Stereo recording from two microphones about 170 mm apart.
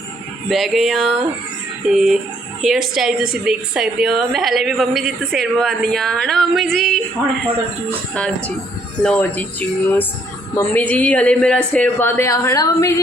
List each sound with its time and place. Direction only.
0.4 s a woman's voice: centre (ahead or behind)
8.1 s speech: 10° left (ahead or behind)